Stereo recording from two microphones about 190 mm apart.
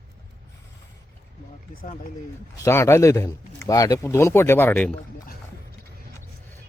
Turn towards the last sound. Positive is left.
turn(degrees=10)  # may be behind; listen again after turning